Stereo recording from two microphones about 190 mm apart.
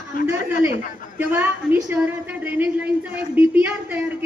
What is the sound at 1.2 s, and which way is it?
A woman's voice, 10° right (ahead or behind).